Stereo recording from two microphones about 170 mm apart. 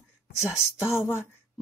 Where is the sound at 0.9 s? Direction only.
15° left (ahead or behind).